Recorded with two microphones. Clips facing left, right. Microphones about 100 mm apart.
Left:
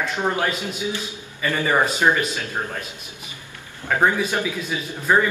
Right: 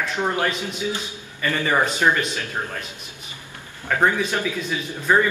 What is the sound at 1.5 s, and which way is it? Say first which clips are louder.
A man's voice: left 1 dB; 15° left (ahead or behind).